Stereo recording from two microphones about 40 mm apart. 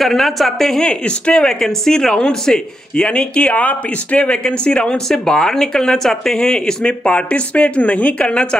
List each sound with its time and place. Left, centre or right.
0.0 s a woman's voice: centre
0.8 s speech: left
3.1 s speech: left
3.5 s speech: left
4.2 s speech: left
5.0 s speech: centre
7.1 s speech: left